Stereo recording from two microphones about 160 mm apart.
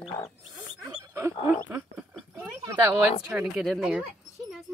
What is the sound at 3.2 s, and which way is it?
Speech, 10° right (ahead or behind).